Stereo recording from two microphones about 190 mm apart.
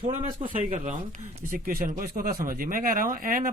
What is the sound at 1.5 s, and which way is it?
Speech, 50° right (ahead or behind).